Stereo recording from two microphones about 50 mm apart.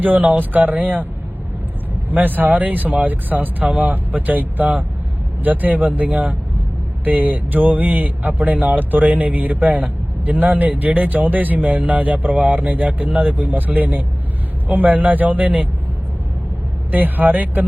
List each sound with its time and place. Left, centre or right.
0.0 s speech: right
2.0 s speech: right
16.9 s speech: right